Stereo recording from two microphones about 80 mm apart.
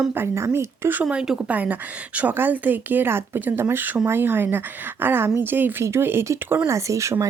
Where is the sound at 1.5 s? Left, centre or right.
Right.